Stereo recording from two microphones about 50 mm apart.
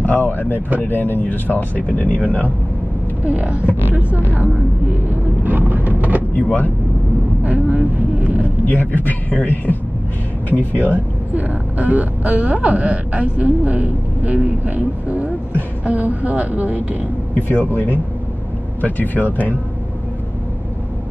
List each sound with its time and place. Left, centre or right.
0.0 s speech: left
2.2 s a woman's voice: right
5.1 s vehicle: right
6.3 s speech: left
7.4 s speech: right
8.6 s speech: left
10.8 s a woman's voice: right
17.6 s speech: left